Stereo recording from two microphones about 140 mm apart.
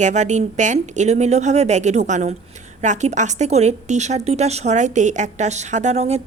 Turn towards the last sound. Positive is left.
turn(degrees=-50)  # may be behind; listen again after turning